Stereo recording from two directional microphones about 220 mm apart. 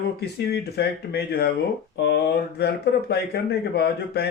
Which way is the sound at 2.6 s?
50° left (ahead or behind).